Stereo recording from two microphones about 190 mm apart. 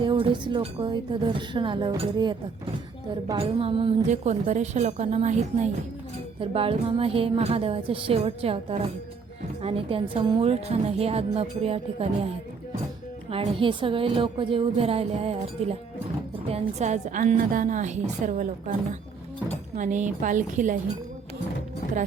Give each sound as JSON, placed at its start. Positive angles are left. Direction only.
{"t": 0.0, "sound": "a woman's voice", "side_deg": -25}
{"t": 3.3, "sound": "a woman's voice", "side_deg": -30}
{"t": 13.3, "sound": "a woman's voice", "side_deg": -30}
{"t": 19.7, "sound": "a woman's voice", "side_deg": -40}